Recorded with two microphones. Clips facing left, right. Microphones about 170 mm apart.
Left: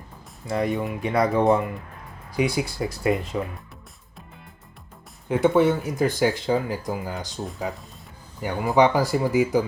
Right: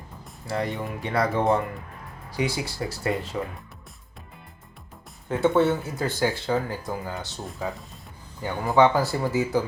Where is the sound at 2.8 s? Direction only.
20° left (ahead or behind).